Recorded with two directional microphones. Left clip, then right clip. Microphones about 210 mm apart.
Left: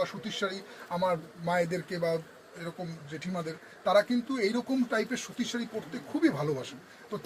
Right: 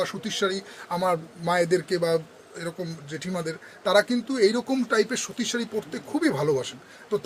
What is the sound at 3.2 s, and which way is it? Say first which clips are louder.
Speech: right 5 dB; 45° right (ahead or behind).